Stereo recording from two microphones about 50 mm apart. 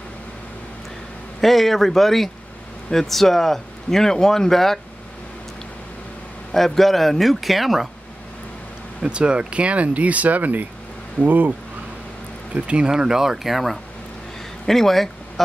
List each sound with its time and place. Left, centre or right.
1.4 s speech: centre
6.5 s speech: centre
9.0 s speech: right
12.5 s speech: right
12.9 s speech: centre